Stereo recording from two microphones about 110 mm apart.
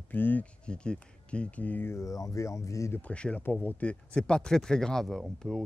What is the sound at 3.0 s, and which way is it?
Speech, 10° left (ahead or behind).